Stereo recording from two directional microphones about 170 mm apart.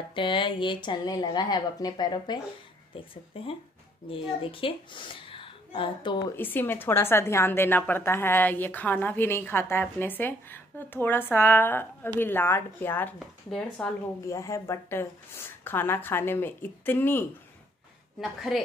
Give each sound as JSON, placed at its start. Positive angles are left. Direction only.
{"t": 0.1, "sound": "speech", "side_deg": 30}
{"t": 3.3, "sound": "a woman's voice", "side_deg": 35}
{"t": 6.3, "sound": "a woman's voice", "side_deg": 10}
{"t": 14.2, "sound": "a woman's voice", "side_deg": 20}
{"t": 18.2, "sound": "a woman's voice", "side_deg": 0}